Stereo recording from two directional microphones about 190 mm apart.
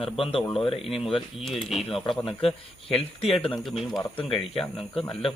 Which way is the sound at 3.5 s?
Centre (ahead or behind).